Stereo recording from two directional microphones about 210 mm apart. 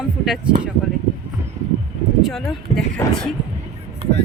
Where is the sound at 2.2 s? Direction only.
Centre (ahead or behind).